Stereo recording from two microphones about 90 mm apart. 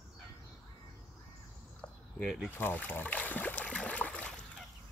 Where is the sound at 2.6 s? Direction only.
20° left (ahead or behind).